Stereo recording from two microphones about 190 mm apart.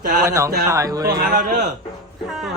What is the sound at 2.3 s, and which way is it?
Speech, centre (ahead or behind).